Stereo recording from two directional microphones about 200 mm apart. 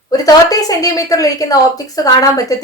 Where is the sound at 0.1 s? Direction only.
20° left (ahead or behind).